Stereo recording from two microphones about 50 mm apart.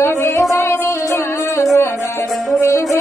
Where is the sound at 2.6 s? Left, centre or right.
Left.